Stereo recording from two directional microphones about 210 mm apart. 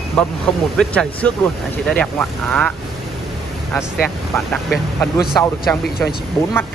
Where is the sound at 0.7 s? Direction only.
5° left (ahead or behind).